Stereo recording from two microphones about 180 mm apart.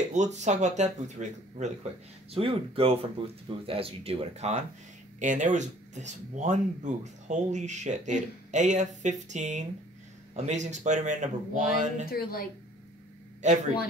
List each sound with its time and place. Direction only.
0.1 s speech: 40° right (ahead or behind)
12.1 s a woman's voice: 55° left (ahead or behind)